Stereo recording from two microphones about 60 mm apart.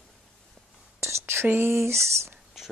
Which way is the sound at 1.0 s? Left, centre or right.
Right.